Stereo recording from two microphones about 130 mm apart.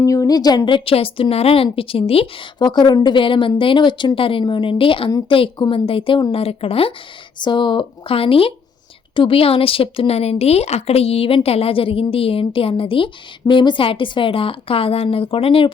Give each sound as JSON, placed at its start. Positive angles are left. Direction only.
{"t": 0.0, "sound": "a woman's voice", "side_deg": 25}
{"t": 2.6, "sound": "a woman's voice", "side_deg": 35}
{"t": 7.3, "sound": "a woman's voice", "side_deg": 35}